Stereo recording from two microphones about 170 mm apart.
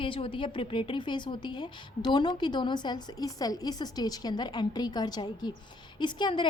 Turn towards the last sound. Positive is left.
turn(degrees=25)  # may be behind; listen again after turning